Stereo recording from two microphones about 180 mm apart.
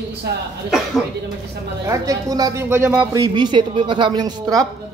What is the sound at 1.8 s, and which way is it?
Speech, 20° right (ahead or behind).